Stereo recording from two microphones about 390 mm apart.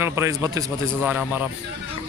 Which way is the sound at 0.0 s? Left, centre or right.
Centre.